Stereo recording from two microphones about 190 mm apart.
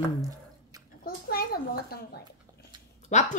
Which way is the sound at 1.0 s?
55° left (ahead or behind).